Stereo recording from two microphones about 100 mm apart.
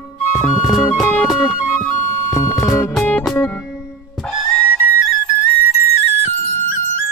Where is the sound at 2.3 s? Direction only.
30° left (ahead or behind).